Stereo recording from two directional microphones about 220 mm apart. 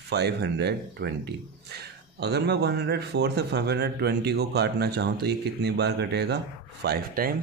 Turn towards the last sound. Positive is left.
turn(degrees=-45)  # may be behind; listen again after turning